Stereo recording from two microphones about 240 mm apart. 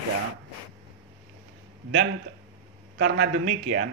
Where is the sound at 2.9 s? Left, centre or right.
Right.